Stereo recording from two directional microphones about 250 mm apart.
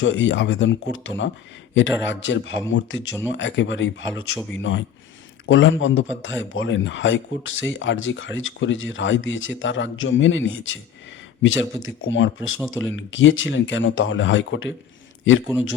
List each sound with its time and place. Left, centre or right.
0.0 s speech: left
4.1 s speech: centre
4.5 s speech: left
12.5 s speech: centre
13.0 s a man's voice: left